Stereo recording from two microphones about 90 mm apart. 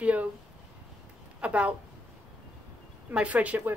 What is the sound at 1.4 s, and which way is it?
Speech, 15° right (ahead or behind).